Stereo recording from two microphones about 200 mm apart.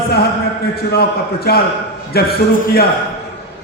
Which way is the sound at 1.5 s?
50° left (ahead or behind).